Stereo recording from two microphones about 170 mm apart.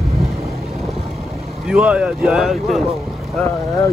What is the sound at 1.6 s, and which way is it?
Speech, 5° right (ahead or behind).